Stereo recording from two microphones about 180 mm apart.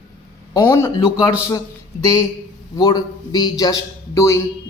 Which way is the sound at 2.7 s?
25° left (ahead or behind).